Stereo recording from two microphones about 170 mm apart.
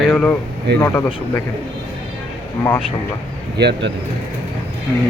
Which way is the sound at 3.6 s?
85° right.